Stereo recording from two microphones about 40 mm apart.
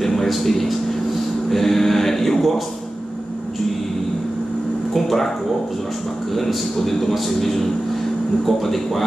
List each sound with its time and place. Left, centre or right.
0.0 s a man's voice: centre
4.9 s a man's voice: centre
6.3 s a man's voice: centre